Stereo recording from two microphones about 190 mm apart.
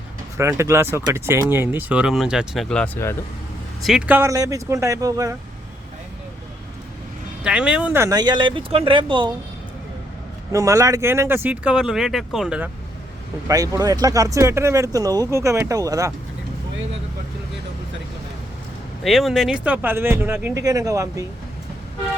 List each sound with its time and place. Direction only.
0.3 s speech: 15° right (ahead or behind); by 3.2 s 10° left (ahead or behind)
3.8 s speech: 5° right (ahead or behind)
7.4 s speech: 5° right (ahead or behind); by 9.3 s 25° right (ahead or behind)
10.5 s speech: 15° right (ahead or behind)
13.5 s speech: 20° right (ahead or behind)
19.0 s speech: centre (ahead or behind); by 21.2 s 15° right (ahead or behind)